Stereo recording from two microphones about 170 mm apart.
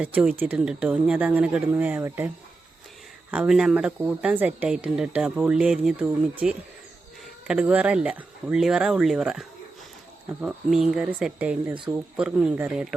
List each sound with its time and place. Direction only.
0.0 s speech: 5° right (ahead or behind)
3.3 s speech: 5° right (ahead or behind)